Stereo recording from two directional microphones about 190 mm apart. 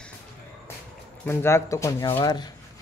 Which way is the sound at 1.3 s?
15° left (ahead or behind).